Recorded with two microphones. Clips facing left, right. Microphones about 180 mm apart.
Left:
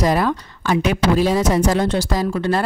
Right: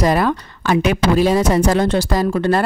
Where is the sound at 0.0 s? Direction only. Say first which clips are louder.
Right 2 dB; 65° right (ahead or behind).